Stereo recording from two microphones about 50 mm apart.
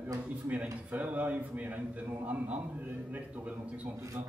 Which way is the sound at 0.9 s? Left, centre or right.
Right.